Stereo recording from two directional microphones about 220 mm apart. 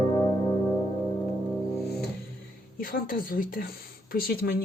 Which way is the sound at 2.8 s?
40° left (ahead or behind).